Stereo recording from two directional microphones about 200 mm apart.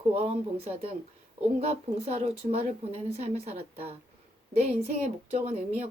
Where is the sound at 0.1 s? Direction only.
30° right (ahead or behind).